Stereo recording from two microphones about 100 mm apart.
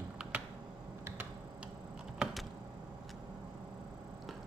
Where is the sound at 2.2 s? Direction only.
Centre (ahead or behind).